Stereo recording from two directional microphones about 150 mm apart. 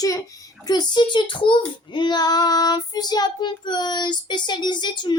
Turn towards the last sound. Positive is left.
turn(degrees=30)  # may be behind; listen again after turning